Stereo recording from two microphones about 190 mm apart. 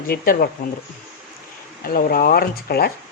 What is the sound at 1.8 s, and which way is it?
Speech, 50° left (ahead or behind).